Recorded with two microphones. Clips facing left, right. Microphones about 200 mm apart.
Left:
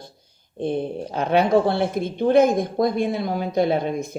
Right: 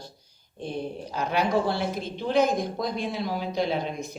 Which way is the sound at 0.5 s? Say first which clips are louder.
Left 8 dB; 55° left (ahead or behind).